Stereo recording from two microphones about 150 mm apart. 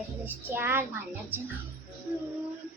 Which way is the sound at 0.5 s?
15° right (ahead or behind).